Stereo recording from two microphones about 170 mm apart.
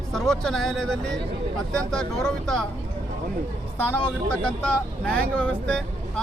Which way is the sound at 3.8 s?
5° left (ahead or behind).